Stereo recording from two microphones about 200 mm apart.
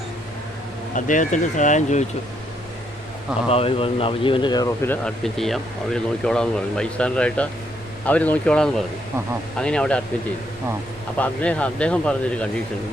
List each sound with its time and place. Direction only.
0.9 s speech: 40° left (ahead or behind)
3.5 s speech: 30° left (ahead or behind)
5.0 s a man's voice: centre (ahead or behind)
11.2 s speech: 5° left (ahead or behind)